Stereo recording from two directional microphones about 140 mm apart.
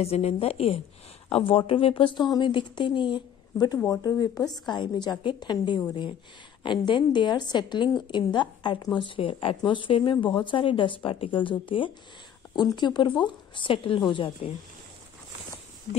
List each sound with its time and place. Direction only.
0.0 s a woman's voice: 45° left (ahead or behind)